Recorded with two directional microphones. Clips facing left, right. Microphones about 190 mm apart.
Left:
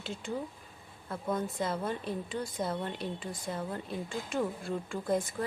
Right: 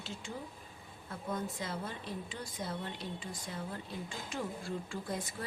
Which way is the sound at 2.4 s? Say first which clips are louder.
Left 6 dB; 55° left (ahead or behind).